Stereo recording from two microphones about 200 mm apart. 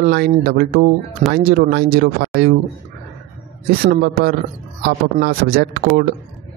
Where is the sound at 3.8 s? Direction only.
50° right (ahead or behind).